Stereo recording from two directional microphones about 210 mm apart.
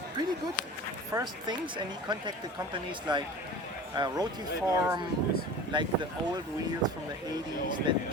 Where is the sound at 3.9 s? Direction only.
20° right (ahead or behind).